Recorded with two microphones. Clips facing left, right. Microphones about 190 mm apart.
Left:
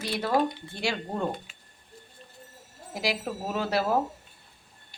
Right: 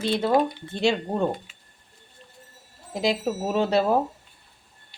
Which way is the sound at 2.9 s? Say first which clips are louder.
Right 6 dB; 25° right (ahead or behind).